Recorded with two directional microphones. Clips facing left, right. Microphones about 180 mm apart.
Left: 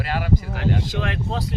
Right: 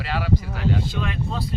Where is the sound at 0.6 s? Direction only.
85° left.